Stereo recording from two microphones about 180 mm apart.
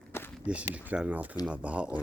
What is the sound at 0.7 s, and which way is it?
Speech, 5° right (ahead or behind).